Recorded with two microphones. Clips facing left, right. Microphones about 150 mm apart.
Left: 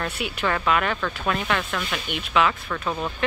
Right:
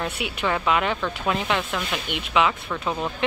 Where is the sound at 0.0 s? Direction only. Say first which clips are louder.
Even; 15° right (ahead or behind).